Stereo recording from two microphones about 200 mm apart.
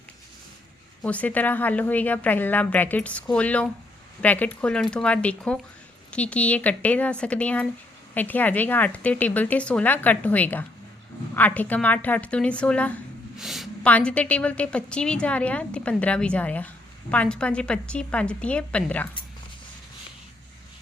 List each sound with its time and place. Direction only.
1.0 s a woman's voice: 5° left (ahead or behind)